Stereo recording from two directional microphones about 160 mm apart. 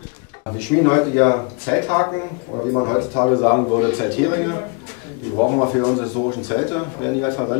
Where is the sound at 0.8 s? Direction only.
20° left (ahead or behind).